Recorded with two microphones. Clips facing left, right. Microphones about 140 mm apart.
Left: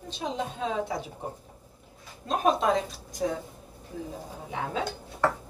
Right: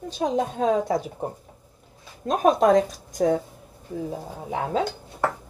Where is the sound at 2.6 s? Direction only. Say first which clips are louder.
Right 8 dB; 45° right (ahead or behind).